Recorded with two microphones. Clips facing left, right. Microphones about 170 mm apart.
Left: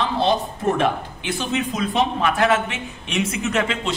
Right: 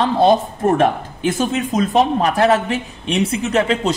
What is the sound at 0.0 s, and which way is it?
A man's voice, 45° right (ahead or behind).